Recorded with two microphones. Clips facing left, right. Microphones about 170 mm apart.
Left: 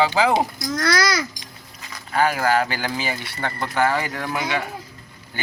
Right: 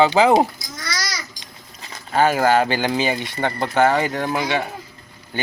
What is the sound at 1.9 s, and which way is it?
Speech, 25° right (ahead or behind).